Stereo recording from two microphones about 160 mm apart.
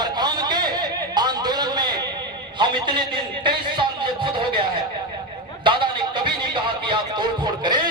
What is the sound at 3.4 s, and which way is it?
Music, 30° right (ahead or behind).